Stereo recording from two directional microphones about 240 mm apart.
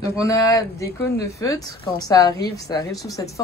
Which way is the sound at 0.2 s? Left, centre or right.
Centre.